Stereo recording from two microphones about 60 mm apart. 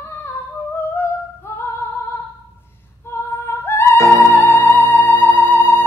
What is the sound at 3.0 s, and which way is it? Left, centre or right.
Female singing, left.